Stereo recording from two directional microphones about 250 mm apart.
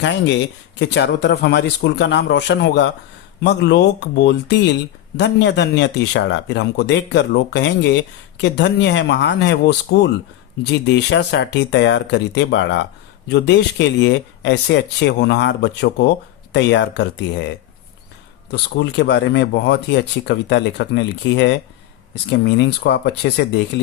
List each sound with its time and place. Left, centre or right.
0.0 s speech: left
18.5 s speech: left